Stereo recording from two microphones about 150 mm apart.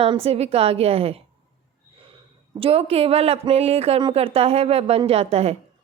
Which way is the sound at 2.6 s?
40° right (ahead or behind).